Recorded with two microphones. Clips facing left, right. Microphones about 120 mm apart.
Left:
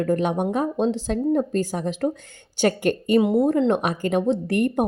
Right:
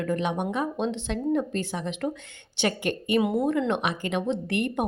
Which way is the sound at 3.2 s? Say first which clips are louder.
Left 5 dB; 30° left (ahead or behind).